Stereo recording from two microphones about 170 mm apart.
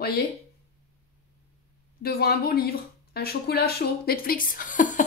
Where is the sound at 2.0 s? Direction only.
65° left (ahead or behind).